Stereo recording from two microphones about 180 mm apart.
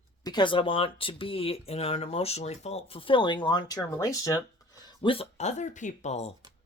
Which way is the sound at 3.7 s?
15° left (ahead or behind).